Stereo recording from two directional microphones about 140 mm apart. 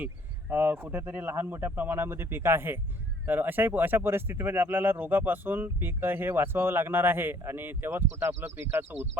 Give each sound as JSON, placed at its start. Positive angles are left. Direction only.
{"t": 0.5, "sound": "speech", "side_deg": -15}